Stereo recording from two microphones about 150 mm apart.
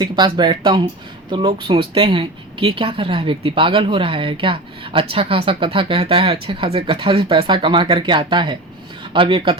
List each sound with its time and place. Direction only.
0.0 s speech: 30° right (ahead or behind)